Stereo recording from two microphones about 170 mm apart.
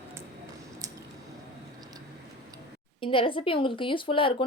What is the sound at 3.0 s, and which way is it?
A woman's voice, 30° left (ahead or behind).